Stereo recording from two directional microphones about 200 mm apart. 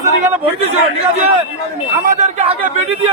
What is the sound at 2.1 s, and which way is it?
Speech, 35° right (ahead or behind).